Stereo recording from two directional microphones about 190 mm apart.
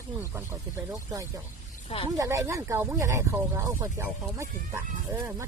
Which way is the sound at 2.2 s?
15° right (ahead or behind).